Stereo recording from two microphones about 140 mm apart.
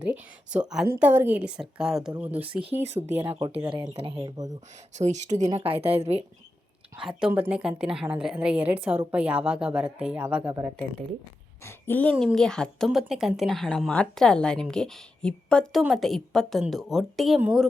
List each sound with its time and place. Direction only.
0.0 s a woman's voice: 10° right (ahead or behind)
2.6 s speech: 45° right (ahead or behind)
3.6 s speech: 35° right (ahead or behind)
4.9 s speech: 55° right (ahead or behind)
6.9 s a woman's voice: 5° right (ahead or behind)
11.6 s a woman's voice: 15° left (ahead or behind); by 17.7 s 5° right (ahead or behind)